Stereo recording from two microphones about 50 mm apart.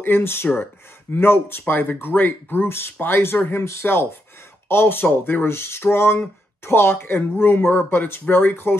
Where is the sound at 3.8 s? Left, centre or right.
Left.